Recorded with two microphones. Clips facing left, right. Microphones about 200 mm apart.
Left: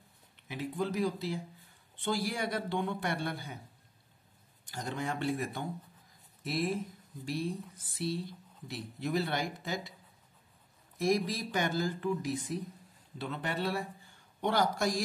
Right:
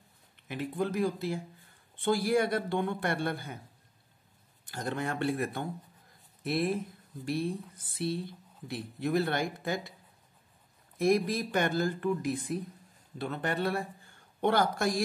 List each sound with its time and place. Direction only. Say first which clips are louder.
0.5 s speech: right 2 dB; 55° right (ahead or behind)
4.6 s speech: right 3 dB; 55° right (ahead or behind)
11.0 s speech: right 4 dB; 55° right (ahead or behind)